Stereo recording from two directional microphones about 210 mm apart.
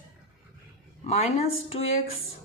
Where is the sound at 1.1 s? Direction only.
30° left (ahead or behind).